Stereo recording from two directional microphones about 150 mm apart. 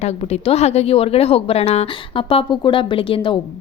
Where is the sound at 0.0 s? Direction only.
45° left (ahead or behind).